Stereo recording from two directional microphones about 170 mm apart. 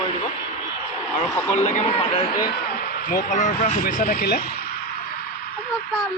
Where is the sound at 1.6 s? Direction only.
40° left (ahead or behind); by 4.4 s 65° left (ahead or behind).